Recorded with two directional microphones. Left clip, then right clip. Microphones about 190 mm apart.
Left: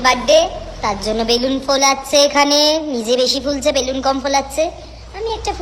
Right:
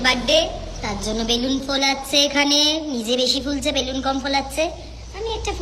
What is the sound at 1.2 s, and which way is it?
A woman's voice, 40° left (ahead or behind).